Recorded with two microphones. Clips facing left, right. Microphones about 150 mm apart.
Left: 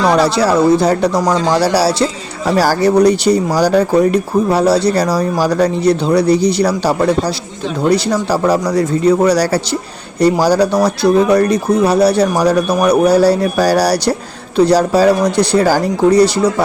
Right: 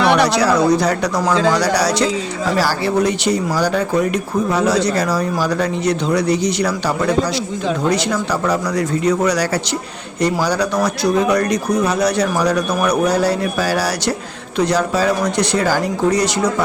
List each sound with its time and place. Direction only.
0.0 s speech: 30° left (ahead or behind)
2.6 s speech: 40° left (ahead or behind)